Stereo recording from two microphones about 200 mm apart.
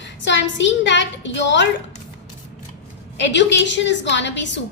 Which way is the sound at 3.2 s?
60° left (ahead or behind).